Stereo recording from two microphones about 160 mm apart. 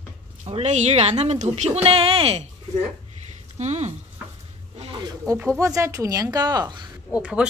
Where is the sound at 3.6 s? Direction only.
45° right (ahead or behind).